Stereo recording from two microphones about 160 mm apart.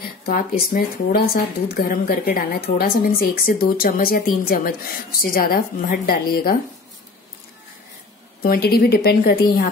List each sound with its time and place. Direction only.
0.2 s speech: 65° left (ahead or behind)
8.4 s a woman's voice: 70° left (ahead or behind)